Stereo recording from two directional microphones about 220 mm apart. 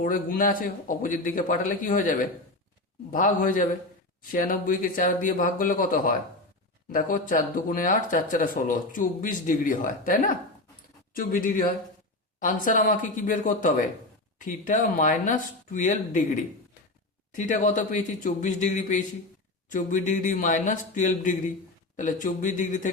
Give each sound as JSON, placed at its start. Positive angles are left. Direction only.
{"t": 0.0, "sound": "speech", "side_deg": 40}
{"t": 3.1, "sound": "speech", "side_deg": 35}